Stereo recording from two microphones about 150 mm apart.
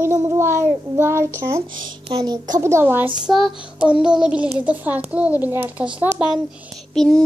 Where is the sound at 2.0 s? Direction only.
35° right (ahead or behind).